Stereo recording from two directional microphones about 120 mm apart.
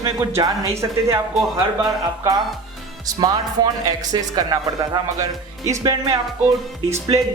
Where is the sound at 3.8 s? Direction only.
30° right (ahead or behind).